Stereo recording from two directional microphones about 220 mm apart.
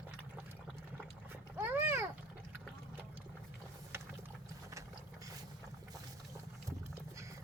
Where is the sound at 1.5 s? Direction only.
10° right (ahead or behind).